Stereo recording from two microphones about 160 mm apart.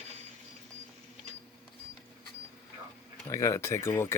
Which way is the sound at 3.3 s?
20° left (ahead or behind).